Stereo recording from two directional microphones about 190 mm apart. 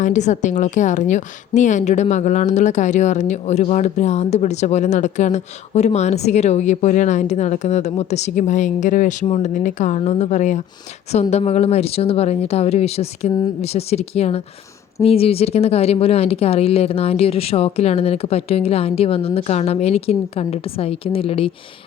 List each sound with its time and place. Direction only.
0.0 s a woman's voice: 40° left (ahead or behind)